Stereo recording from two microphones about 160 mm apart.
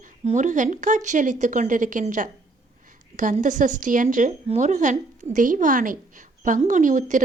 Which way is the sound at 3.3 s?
50° right (ahead or behind).